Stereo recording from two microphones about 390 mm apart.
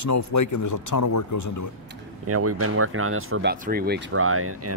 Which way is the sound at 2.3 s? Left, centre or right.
Right.